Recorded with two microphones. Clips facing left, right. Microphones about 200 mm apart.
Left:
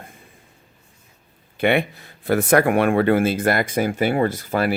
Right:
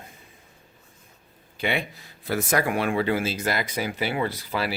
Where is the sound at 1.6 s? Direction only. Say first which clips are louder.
Left 8 dB; 60° left (ahead or behind).